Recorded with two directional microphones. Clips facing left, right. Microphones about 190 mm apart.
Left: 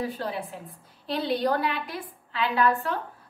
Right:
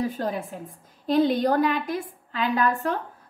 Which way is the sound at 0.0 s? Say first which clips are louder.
Right 3 dB; 45° right (ahead or behind).